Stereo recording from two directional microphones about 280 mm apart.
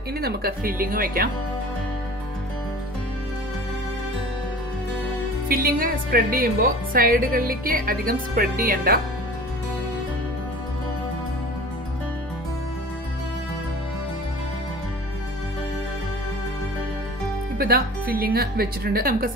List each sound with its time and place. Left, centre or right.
0.2 s speech: right
5.5 s speech: right
17.6 s speech: right